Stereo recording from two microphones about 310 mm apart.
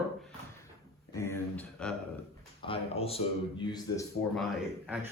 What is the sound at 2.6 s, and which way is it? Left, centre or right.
Speech, centre.